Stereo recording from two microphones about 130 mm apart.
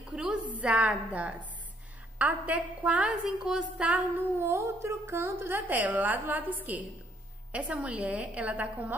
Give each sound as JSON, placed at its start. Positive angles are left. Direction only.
{"t": 0.1, "sound": "a sound", "side_deg": -5}
{"t": 0.6, "sound": "a woman's voice", "side_deg": -10}
{"t": 4.5, "sound": "a woman's voice", "side_deg": -20}